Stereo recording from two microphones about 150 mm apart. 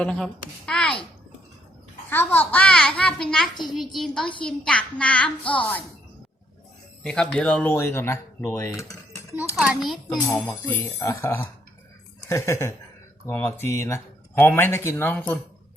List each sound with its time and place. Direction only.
0.0 s a woman's voice: 5° left (ahead or behind)
2.0 s a woman's voice: 15° left (ahead or behind)
7.0 s speech: 5° left (ahead or behind); by 9.0 s 20° left (ahead or behind)
9.6 s a woman's voice: centre (ahead or behind)
10.2 s speech: 15° left (ahead or behind)